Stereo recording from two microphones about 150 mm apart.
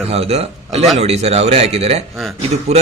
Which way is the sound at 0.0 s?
40° right (ahead or behind).